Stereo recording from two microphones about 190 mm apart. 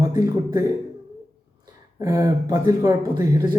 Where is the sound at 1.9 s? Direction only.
15° right (ahead or behind).